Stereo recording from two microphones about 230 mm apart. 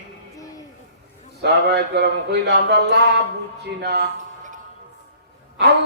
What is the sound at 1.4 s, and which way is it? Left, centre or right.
A man's voice, right.